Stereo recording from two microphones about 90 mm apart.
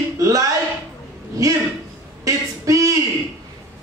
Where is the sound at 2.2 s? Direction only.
35° right (ahead or behind).